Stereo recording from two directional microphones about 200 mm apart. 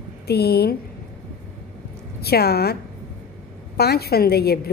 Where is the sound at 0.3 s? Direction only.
50° left (ahead or behind).